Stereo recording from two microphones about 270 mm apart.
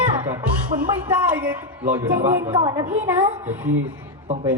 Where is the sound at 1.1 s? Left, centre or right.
Centre.